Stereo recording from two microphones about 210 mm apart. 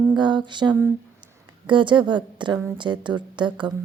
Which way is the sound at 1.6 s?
25° right (ahead or behind).